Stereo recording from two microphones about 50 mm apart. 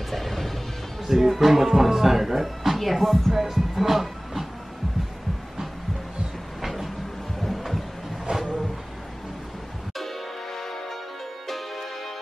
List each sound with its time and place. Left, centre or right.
0.1 s music: centre
1.0 s speech: centre
3.3 s music: centre
6.6 s vehicle: centre
7.4 s a sound: centre
8.3 s music: centre
9.9 s music: centre